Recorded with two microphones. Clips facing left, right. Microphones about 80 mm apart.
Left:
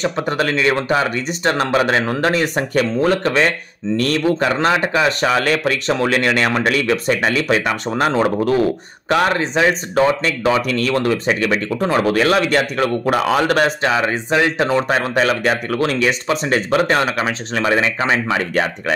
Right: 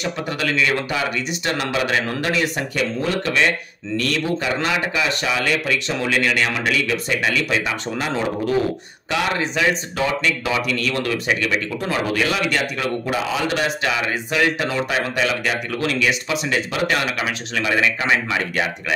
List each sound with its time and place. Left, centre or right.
0.0 s speech: left
9.1 s speech: left
13.8 s speech: left